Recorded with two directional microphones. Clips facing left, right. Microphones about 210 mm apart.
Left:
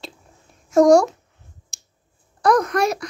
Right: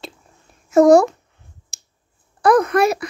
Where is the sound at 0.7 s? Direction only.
5° right (ahead or behind).